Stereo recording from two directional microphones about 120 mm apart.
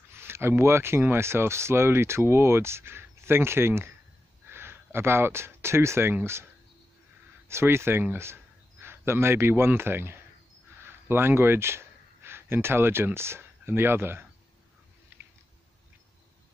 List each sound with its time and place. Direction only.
0.1 s speech: 20° right (ahead or behind)
7.4 s speech: 20° right (ahead or behind)